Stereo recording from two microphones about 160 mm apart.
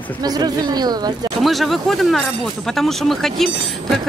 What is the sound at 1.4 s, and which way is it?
Speech, centre (ahead or behind).